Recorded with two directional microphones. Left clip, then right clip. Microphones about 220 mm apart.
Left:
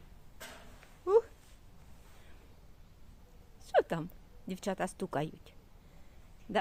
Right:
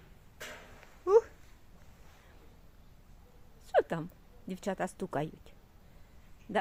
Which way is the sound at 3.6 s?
Centre (ahead or behind).